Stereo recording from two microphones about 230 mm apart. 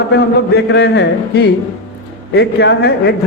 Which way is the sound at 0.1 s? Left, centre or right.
Left.